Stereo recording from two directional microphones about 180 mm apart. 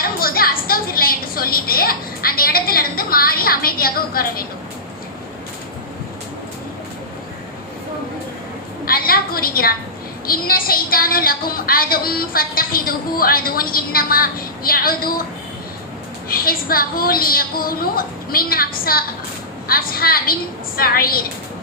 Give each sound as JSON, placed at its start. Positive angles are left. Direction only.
{"t": 0.2, "sound": "a woman's voice", "side_deg": 55}
{"t": 8.8, "sound": "a sound", "side_deg": 55}
{"t": 10.2, "sound": "a woman's voice", "side_deg": 55}
{"t": 16.3, "sound": "a woman's voice", "side_deg": 55}